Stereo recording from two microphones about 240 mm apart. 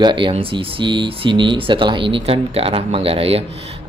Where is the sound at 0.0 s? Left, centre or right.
Centre.